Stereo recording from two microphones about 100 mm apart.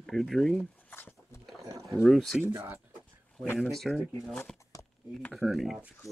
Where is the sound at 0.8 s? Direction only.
20° left (ahead or behind).